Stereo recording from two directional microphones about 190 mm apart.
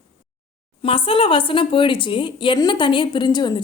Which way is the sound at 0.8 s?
30° left (ahead or behind).